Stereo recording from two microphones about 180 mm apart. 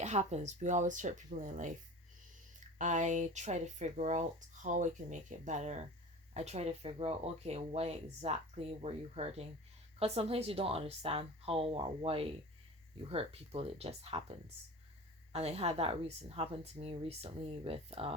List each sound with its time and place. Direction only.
0.0 s speech: 40° right (ahead or behind)
2.7 s speech: 45° right (ahead or behind)